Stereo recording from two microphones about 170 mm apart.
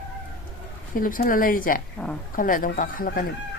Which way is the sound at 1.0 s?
55° left (ahead or behind).